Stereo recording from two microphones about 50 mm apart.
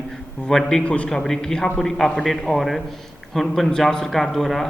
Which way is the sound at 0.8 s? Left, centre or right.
Left.